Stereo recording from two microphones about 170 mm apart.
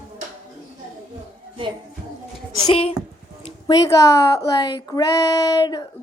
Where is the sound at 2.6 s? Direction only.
35° left (ahead or behind).